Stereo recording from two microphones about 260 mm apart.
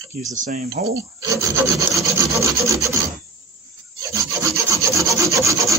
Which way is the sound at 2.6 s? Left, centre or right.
Centre.